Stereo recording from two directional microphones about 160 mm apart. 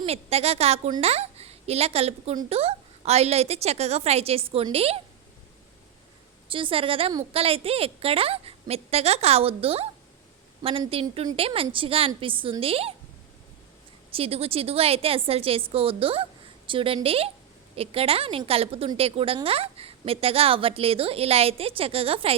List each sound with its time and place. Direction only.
0.0 s a woman's voice: 40° right (ahead or behind)
6.5 s a woman's voice: 35° right (ahead or behind)
14.1 s a woman's voice: 40° right (ahead or behind)